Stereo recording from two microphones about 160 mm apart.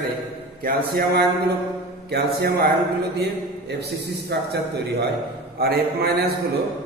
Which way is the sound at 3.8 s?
90° right.